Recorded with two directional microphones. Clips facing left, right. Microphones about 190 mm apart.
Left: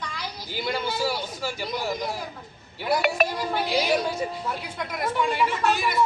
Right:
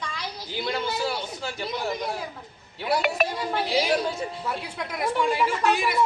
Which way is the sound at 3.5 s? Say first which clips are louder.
Right 2 dB; centre (ahead or behind).